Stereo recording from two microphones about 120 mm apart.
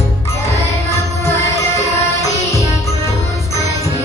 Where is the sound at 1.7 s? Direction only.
25° left (ahead or behind).